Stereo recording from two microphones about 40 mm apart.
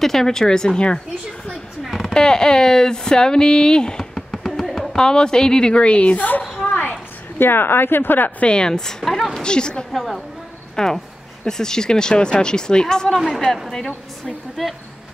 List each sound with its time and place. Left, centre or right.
0.0 s speech: centre
1.9 s a sound: centre
2.1 s speech: centre
4.1 s a sound: centre
4.9 s speech: centre
6.1 s speech: left
7.3 s speech: left
8.4 s speech: left; by 9.4 s centre
9.4 s speech: left
9.9 s a woman's voice: centre
10.8 s a woman's voice: centre
14.6 s a woman's voice: centre